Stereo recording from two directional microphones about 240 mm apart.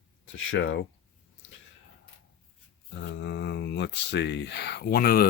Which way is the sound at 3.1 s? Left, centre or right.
Left.